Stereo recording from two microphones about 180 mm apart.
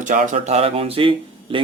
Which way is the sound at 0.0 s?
45° right (ahead or behind).